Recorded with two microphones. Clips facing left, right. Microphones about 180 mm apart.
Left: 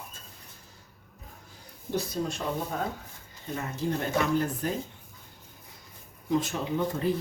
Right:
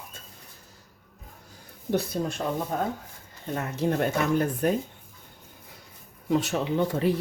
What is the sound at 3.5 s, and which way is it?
Speech, 60° right (ahead or behind).